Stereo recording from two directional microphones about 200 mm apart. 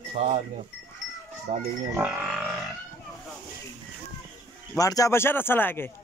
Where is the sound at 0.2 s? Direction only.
30° right (ahead or behind).